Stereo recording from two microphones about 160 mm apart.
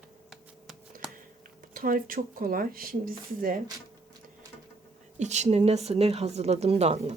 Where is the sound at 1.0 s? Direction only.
5° right (ahead or behind).